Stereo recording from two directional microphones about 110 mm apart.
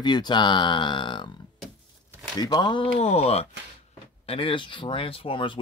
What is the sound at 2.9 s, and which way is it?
Speech, 70° left (ahead or behind).